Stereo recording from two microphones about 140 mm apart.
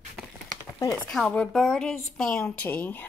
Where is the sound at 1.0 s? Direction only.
5° left (ahead or behind).